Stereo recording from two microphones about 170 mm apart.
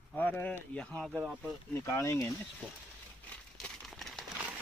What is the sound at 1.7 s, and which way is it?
Speech, 20° left (ahead or behind).